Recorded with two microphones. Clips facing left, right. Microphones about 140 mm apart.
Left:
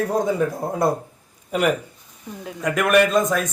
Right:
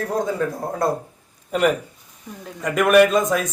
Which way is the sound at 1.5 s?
Centre (ahead or behind).